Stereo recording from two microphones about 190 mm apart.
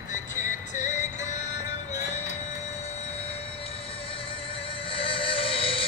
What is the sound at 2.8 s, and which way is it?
Train, 30° left (ahead or behind).